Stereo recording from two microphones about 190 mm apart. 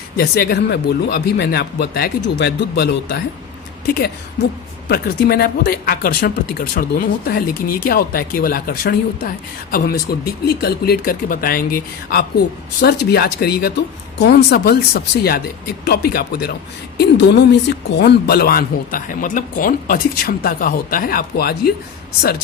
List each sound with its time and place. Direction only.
0.2 s speech: 55° left (ahead or behind)
7.9 s speech: 50° left (ahead or behind)